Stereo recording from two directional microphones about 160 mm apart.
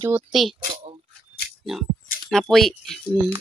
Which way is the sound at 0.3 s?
Centre (ahead or behind).